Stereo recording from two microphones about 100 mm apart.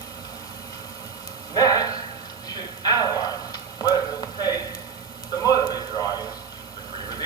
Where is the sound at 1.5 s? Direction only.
40° left (ahead or behind).